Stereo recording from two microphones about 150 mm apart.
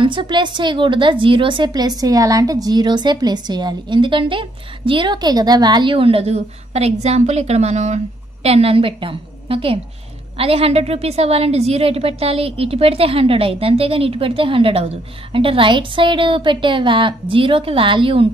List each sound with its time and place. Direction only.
0.0 s a woman's voice: 35° right (ahead or behind)